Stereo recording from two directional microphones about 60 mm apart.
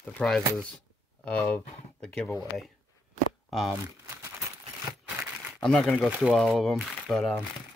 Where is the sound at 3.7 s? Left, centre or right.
Right.